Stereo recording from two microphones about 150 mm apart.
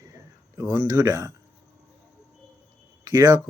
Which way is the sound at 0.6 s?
20° right (ahead or behind).